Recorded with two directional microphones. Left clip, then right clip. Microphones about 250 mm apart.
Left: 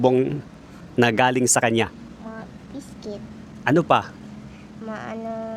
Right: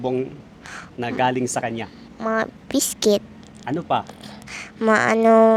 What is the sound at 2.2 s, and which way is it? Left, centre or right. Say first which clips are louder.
Speech: right 17 dB; right.